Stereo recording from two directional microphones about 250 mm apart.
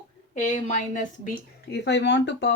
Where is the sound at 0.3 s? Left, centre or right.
Left.